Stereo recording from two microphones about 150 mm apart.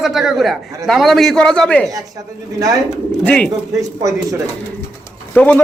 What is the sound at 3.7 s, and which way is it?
Speech, 20° right (ahead or behind).